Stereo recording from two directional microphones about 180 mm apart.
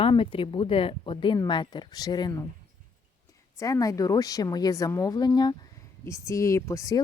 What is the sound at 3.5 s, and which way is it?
A woman's voice, 20° left (ahead or behind).